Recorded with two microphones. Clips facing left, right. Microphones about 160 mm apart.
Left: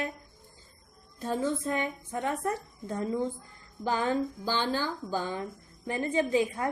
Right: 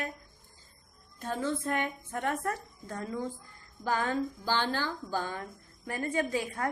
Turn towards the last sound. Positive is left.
turn(degrees=20)  # may be behind; listen again after turning